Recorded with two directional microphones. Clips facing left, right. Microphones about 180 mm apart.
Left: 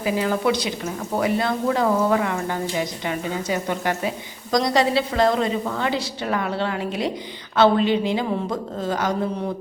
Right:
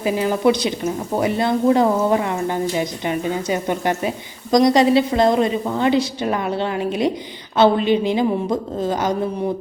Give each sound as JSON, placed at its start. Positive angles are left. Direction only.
{"t": 0.0, "sound": "a woman's voice", "side_deg": -25}